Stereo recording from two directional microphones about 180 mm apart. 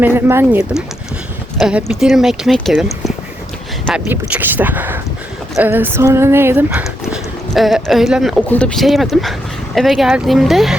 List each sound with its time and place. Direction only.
0.0 s speech: 10° right (ahead or behind)
1.5 s speech: centre (ahead or behind)
4.1 s speech: 10° right (ahead or behind)